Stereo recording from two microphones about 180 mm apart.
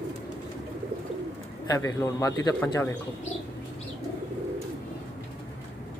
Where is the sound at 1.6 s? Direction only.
15° left (ahead or behind).